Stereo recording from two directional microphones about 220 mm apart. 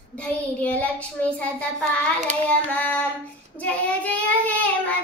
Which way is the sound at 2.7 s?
5° left (ahead or behind).